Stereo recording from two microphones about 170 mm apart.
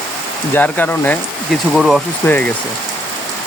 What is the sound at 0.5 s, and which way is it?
Speech, 10° left (ahead or behind).